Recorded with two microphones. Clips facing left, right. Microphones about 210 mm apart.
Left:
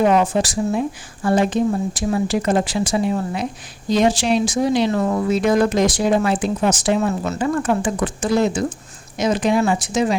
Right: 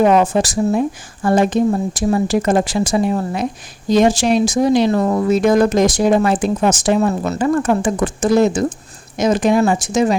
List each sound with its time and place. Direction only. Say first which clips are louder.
0.4 s speech: right 4 dB; 45° right (ahead or behind)